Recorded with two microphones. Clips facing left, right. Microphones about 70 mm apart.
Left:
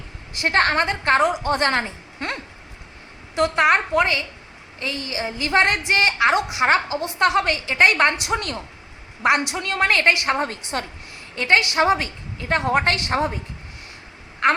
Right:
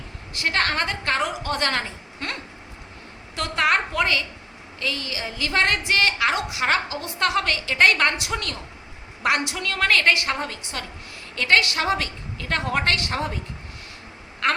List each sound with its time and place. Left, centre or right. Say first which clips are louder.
0.3 s a woman's voice: left 5 dB; left
11.3 s a woman's voice: left 2 dB; centre
14.4 s a woman's voice: left 4 dB; centre